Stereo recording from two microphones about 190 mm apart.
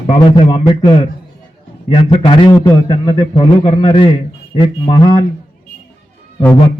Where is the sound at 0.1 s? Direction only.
25° left (ahead or behind).